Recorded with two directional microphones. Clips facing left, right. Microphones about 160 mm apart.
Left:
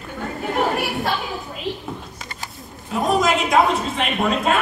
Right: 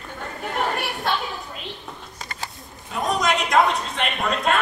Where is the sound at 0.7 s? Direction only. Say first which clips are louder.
Left 3 dB; centre (ahead or behind).